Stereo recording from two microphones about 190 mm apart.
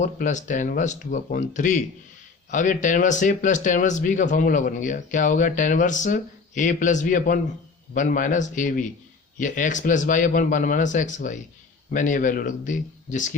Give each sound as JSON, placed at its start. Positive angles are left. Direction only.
{"t": 0.0, "sound": "speech", "side_deg": 40}